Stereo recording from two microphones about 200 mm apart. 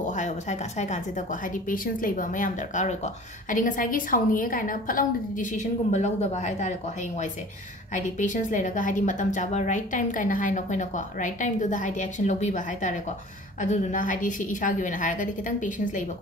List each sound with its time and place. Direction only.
0.0 s a woman's voice: 40° left (ahead or behind)
7.9 s a woman's voice: 40° left (ahead or behind)